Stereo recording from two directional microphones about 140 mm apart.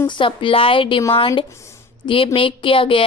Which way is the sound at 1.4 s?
20° left (ahead or behind).